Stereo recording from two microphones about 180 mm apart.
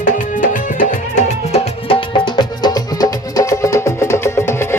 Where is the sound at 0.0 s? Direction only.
45° left (ahead or behind).